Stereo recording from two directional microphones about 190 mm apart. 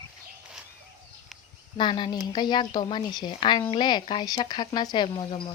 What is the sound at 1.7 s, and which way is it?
Speech, 25° left (ahead or behind).